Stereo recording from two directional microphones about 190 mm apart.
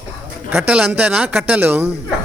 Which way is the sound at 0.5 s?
5° right (ahead or behind).